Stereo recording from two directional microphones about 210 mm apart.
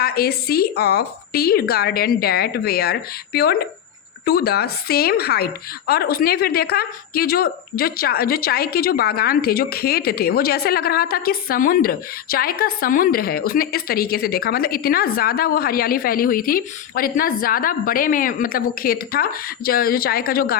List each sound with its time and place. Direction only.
0.0 s speech: 50° left (ahead or behind)